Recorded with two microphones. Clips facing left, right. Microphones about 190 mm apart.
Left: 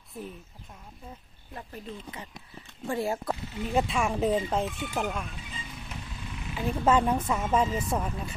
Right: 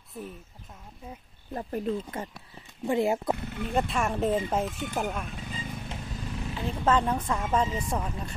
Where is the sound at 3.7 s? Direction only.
Centre (ahead or behind).